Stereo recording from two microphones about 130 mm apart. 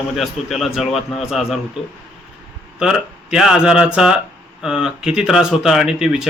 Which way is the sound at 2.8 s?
5° right (ahead or behind).